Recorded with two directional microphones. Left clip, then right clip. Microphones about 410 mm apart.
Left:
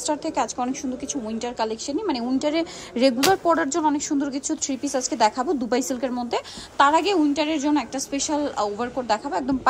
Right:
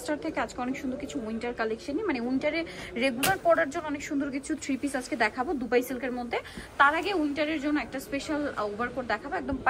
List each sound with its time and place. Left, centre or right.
0.1 s a woman's voice: centre